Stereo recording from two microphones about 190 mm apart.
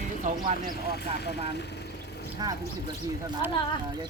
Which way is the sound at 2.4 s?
20° right (ahead or behind).